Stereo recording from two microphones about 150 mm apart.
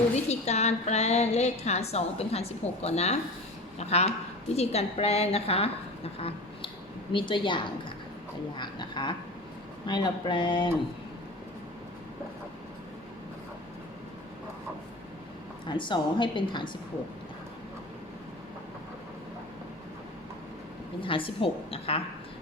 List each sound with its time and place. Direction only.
0.3 s a woman's voice: 45° left (ahead or behind)
15.6 s a woman's voice: 30° left (ahead or behind)
21.0 s a woman's voice: 35° left (ahead or behind)